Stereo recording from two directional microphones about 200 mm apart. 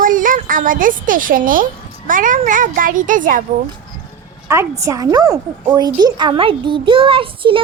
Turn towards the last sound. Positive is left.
turn(degrees=-25)  # may be behind; listen again after turning